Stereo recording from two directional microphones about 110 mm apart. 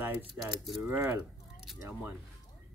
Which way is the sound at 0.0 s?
20° right (ahead or behind).